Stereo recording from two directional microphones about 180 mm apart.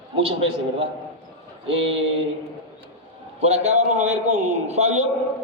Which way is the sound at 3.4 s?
35° right (ahead or behind).